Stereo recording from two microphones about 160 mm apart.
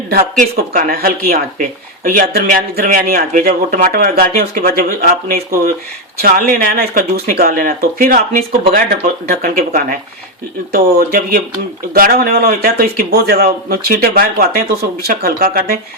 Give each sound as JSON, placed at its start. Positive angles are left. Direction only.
{"t": 0.5, "sound": "speech", "side_deg": -65}
{"t": 10.7, "sound": "speech", "side_deg": -70}